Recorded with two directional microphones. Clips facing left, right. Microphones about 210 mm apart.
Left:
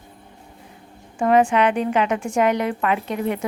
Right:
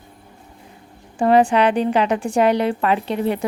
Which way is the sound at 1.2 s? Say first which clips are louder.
Right 2 dB; 35° right (ahead or behind).